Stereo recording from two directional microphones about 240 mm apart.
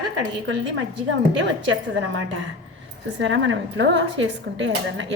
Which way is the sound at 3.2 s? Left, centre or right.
Right.